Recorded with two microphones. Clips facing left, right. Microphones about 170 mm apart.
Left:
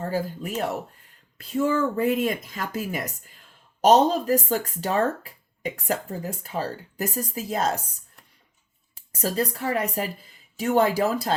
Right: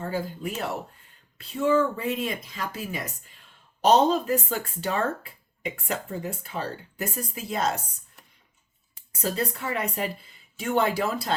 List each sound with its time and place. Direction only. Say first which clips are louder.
0.0 s speech: left 2 dB; 40° left (ahead or behind)
2.0 s speech: left 6 dB; 50° left (ahead or behind)
9.1 s speech: left 2 dB; 40° left (ahead or behind)